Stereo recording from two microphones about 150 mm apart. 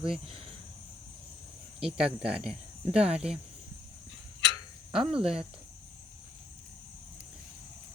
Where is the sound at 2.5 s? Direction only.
45° right (ahead or behind).